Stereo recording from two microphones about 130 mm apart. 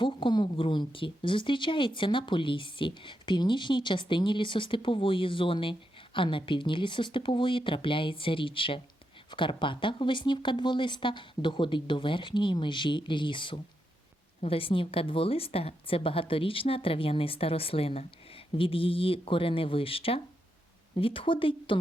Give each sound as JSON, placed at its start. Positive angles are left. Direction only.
{"t": 0.0, "sound": "a woman's voice", "side_deg": 40}